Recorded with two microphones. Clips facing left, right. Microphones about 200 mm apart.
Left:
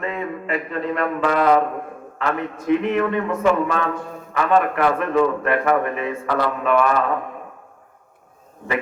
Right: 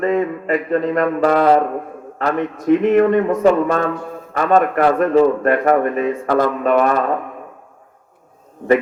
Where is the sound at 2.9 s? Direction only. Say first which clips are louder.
Right 7 dB; 45° right (ahead or behind).